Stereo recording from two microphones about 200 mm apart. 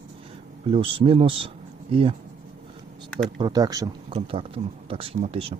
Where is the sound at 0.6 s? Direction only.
30° right (ahead or behind).